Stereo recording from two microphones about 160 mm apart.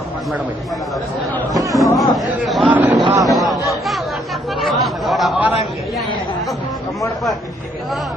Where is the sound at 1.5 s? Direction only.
20° right (ahead or behind).